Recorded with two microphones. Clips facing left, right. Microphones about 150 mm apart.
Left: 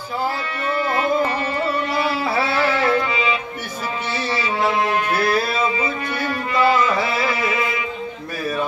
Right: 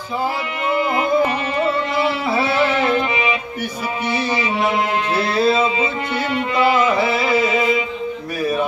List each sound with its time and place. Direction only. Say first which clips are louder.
0.7 s music: right 2 dB; 20° right (ahead or behind)